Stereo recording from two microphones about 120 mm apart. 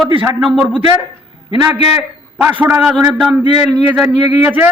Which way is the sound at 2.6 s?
10° right (ahead or behind).